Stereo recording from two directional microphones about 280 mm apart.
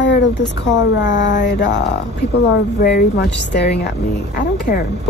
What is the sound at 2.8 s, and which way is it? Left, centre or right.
Speech, left.